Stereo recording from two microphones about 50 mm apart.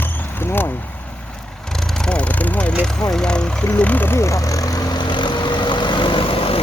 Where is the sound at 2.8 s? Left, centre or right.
Centre.